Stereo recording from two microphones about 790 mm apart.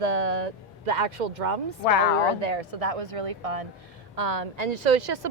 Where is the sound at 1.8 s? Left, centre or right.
Left.